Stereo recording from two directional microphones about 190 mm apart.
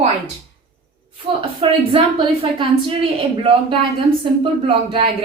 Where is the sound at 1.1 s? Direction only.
30° right (ahead or behind).